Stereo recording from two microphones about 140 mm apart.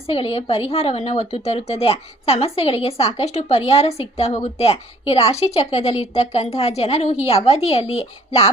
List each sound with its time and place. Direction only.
0.1 s a woman's voice: 45° left (ahead or behind)